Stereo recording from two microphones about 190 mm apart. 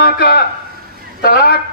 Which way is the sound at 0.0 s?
55° left (ahead or behind).